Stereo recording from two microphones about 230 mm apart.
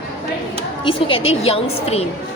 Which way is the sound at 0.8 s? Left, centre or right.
Left.